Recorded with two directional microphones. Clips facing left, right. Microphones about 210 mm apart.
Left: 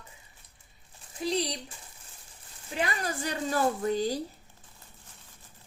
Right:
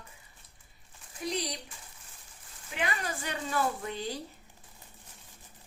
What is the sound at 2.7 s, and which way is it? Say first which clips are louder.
A woman's voice: left 3 dB; 35° left (ahead or behind).